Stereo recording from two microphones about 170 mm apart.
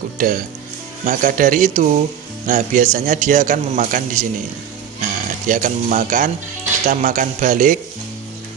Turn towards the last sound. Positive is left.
turn(degrees=-50)  # may be behind; listen again after turning